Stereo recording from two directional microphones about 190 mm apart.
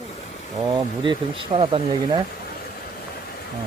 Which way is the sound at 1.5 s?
30° right (ahead or behind).